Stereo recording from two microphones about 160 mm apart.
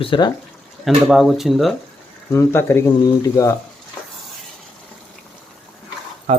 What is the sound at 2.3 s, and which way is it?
Speech, 15° left (ahead or behind).